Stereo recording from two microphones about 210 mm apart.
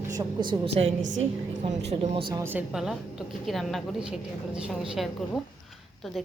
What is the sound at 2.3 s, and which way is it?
A woman's voice, 10° right (ahead or behind).